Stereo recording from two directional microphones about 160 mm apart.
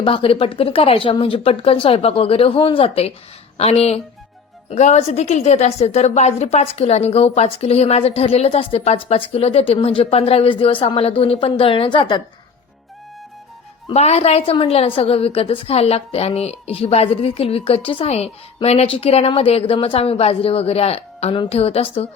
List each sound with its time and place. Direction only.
0.0 s a woman's voice: 35° left (ahead or behind)
13.8 s a woman's voice: 40° left (ahead or behind)